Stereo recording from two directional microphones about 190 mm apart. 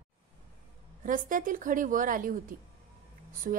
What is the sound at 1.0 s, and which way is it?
A woman's voice, 45° right (ahead or behind).